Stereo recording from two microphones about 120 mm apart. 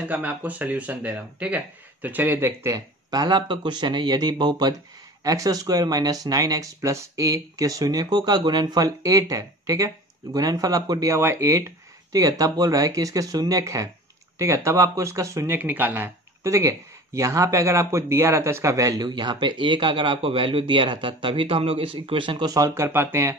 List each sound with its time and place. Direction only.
0.1 s speech: 15° right (ahead or behind); by 22.5 s 45° right (ahead or behind)
22.5 s speech: 30° right (ahead or behind)
22.8 s speech: 20° right (ahead or behind)